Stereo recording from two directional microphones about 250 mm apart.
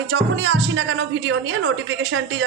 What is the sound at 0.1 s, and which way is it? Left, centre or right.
A woman's voice, right.